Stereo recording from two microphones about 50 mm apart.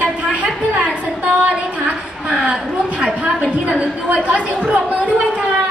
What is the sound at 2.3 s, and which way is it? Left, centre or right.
A woman's voice, right.